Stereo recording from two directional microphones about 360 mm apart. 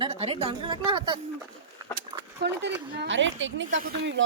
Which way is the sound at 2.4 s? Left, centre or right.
Right.